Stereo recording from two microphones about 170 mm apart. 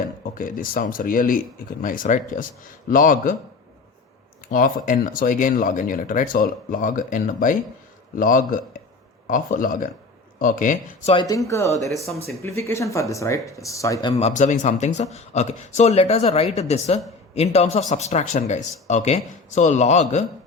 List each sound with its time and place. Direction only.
0.3 s speech: 55° left (ahead or behind)
4.5 s speech: 55° left (ahead or behind)
11.1 s speech: 25° left (ahead or behind)
14.1 s speech: 40° left (ahead or behind)